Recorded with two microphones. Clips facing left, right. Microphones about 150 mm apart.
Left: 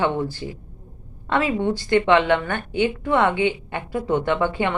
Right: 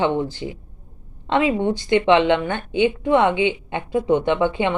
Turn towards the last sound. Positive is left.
turn(degrees=-20)  # may be behind; listen again after turning